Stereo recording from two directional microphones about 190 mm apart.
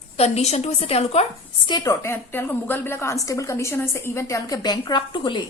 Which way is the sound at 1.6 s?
20° left (ahead or behind).